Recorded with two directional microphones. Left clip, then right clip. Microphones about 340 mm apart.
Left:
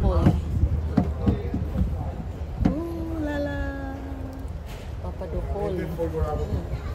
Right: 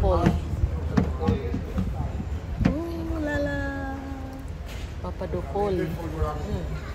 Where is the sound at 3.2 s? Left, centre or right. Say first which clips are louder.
Right 2 dB; centre.